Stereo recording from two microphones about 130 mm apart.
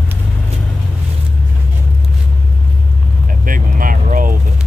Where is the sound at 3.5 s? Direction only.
90° right.